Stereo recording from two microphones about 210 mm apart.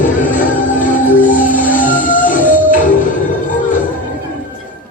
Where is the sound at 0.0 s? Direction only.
40° left (ahead or behind).